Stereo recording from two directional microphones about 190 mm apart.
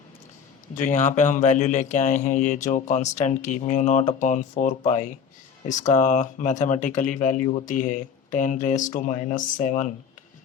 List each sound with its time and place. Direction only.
0.8 s a man's voice: 40° left (ahead or behind)